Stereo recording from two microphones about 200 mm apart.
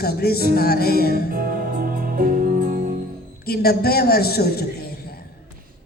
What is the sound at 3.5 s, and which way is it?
A man's voice, 50° left (ahead or behind).